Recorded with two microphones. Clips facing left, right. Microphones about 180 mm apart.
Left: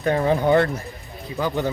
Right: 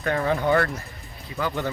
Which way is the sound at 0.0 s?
20° left (ahead or behind).